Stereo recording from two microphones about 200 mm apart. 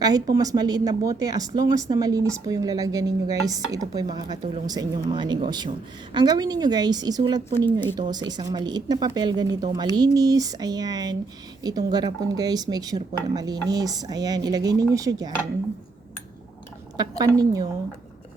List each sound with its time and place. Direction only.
0.0 s speech: 20° right (ahead or behind)
7.5 s speech: 10° left (ahead or behind)
8.1 s speech: 20° right (ahead or behind)
17.0 s speech: 20° right (ahead or behind)